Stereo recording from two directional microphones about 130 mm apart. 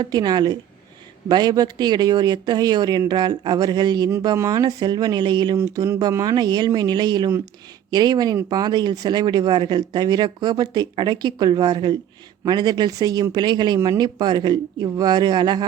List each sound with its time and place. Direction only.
0.0 s speech: 30° right (ahead or behind)